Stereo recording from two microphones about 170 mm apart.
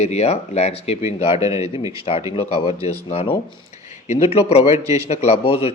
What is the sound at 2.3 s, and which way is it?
Speech, 35° left (ahead or behind).